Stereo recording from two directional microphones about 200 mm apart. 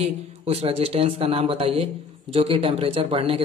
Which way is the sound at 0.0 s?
30° right (ahead or behind).